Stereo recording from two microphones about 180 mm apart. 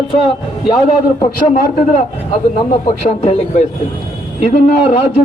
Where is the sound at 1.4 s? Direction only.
45° left (ahead or behind).